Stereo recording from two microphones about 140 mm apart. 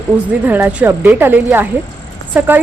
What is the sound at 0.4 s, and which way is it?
A woman's voice, 10° right (ahead or behind).